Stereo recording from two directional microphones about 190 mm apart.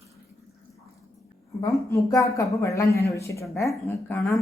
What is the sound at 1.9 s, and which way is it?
A woman's voice, 15° left (ahead or behind).